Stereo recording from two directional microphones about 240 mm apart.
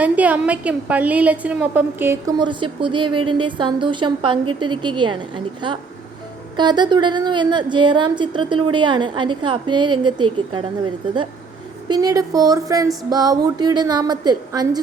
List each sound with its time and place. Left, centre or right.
0.0 s a woman's voice: centre
11.9 s a woman's voice: centre